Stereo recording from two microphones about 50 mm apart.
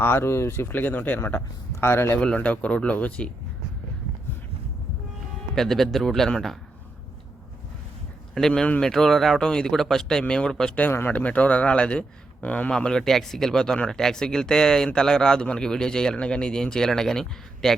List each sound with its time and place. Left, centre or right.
0.0 s speech: left
0.7 s speech: left
1.8 s speech: left
2.1 s speech: left
5.5 s speech: centre
8.4 s speech: centre
11.0 s speech: left
12.7 s speech: centre